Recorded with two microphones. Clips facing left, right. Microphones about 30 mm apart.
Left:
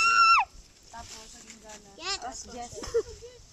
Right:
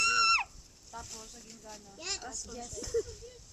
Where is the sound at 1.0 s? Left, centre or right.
Left.